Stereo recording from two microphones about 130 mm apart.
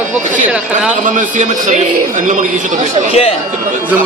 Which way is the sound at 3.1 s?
50° left (ahead or behind).